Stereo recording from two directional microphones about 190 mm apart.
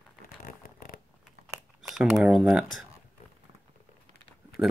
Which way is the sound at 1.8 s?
5° right (ahead or behind).